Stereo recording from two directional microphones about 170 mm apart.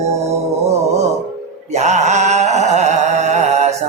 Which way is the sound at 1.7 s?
40° right (ahead or behind).